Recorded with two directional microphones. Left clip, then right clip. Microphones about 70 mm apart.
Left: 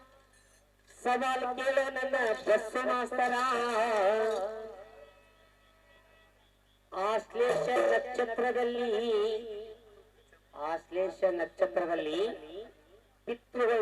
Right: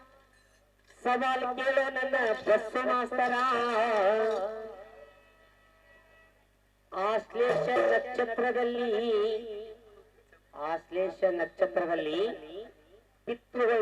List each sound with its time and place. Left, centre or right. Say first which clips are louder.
0.9 s speech: right 2 dB; centre
6.9 s speech: right 2 dB; right
13.2 s a sound: right 2 dB; right